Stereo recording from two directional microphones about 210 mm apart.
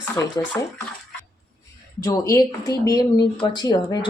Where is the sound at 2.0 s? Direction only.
15° left (ahead or behind).